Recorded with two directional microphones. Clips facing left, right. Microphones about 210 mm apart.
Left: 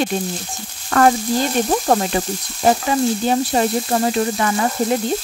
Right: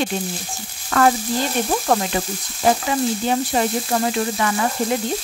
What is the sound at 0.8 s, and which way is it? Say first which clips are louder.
Frying: left 2 dB; 45° left (ahead or behind).